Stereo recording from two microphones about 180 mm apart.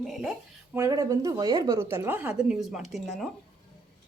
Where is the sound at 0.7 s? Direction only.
15° right (ahead or behind); by 3.2 s centre (ahead or behind).